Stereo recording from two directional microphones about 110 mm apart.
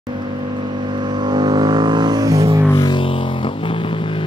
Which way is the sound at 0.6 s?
45° right (ahead or behind).